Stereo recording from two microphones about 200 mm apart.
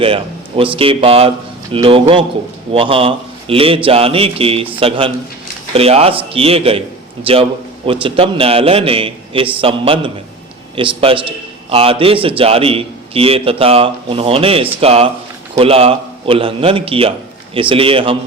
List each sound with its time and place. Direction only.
0.0 s a man's voice: 25° right (ahead or behind)